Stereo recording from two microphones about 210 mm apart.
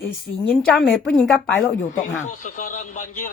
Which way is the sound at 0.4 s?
Centre (ahead or behind).